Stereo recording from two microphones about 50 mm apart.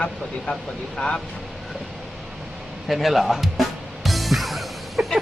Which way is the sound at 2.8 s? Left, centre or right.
Centre.